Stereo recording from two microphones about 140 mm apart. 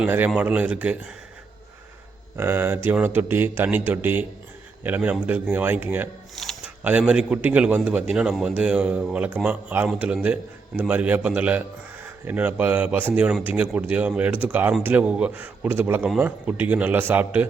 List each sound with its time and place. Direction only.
0.0 s a man's voice: 15° right (ahead or behind)
2.3 s a man's voice: 15° right (ahead or behind)
6.3 s a sound: centre (ahead or behind)
6.8 s a man's voice: 10° right (ahead or behind)